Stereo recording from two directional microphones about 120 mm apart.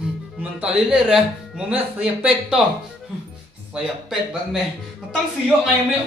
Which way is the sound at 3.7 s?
5° right (ahead or behind).